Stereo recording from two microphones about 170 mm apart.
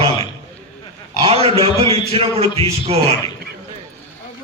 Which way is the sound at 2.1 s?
35° right (ahead or behind).